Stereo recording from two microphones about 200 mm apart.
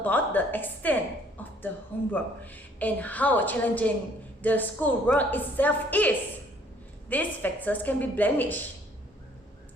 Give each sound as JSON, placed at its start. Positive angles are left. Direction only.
{"t": 0.0, "sound": "a woman's voice", "side_deg": 10}